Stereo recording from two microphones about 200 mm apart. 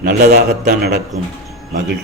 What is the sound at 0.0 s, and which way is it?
Speech, 55° right (ahead or behind).